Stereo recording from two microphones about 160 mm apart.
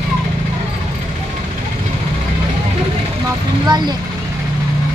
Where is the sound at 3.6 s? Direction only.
25° right (ahead or behind).